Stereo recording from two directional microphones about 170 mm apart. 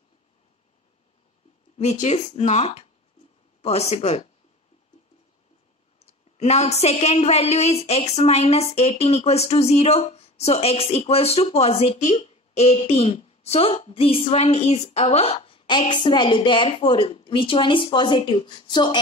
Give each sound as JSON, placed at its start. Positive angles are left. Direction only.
{"t": 1.8, "sound": "a woman's voice", "side_deg": 40}
{"t": 5.9, "sound": "a woman's voice", "side_deg": 40}